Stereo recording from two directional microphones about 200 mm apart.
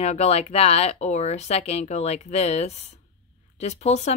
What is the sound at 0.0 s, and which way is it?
A woman's voice, 35° left (ahead or behind).